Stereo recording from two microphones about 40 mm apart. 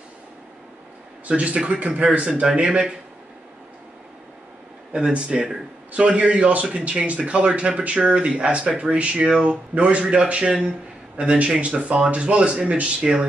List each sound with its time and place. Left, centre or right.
1.2 s a man's voice: right
2.6 s speech: centre
5.1 s speech: right
13.0 s speech: centre